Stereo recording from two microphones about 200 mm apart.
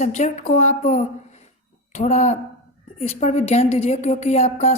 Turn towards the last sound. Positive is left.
turn(degrees=35)  # may be behind; listen again after turning